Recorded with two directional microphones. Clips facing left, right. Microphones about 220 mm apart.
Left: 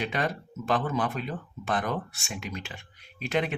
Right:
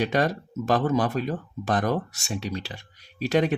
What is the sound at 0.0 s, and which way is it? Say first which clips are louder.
Speech: right 6 dB; 40° right (ahead or behind).